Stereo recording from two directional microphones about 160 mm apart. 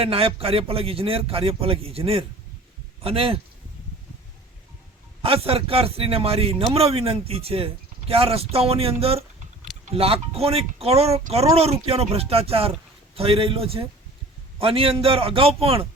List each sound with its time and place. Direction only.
0.0 s a man's voice: 35° right (ahead or behind)
5.2 s a man's voice: 35° right (ahead or behind)